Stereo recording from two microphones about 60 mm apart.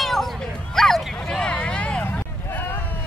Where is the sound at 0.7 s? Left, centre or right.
Centre.